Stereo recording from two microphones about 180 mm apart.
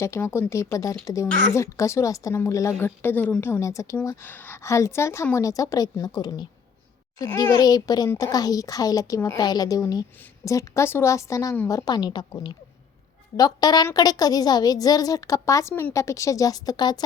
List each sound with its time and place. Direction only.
0.0 s a woman's voice: 15° left (ahead or behind)